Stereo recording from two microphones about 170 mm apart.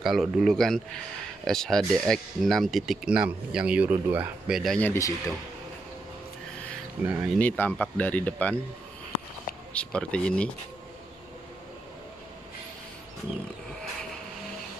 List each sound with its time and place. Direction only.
0.0 s a man's voice: centre (ahead or behind)
4.7 s speech: 15° left (ahead or behind)
7.3 s speech: 10° left (ahead or behind)
9.7 s a man's voice: 5° left (ahead or behind)